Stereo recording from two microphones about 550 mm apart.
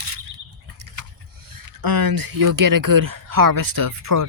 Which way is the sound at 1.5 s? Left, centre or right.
Right.